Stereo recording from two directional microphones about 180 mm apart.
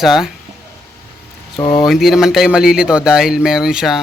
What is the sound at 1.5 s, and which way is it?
Speech, 25° left (ahead or behind).